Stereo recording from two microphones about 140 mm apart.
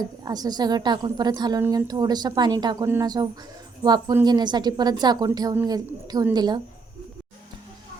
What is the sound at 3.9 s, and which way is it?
A woman's voice, 30° right (ahead or behind).